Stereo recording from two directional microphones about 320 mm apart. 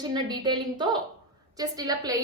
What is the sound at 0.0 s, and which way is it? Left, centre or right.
A woman's voice, centre.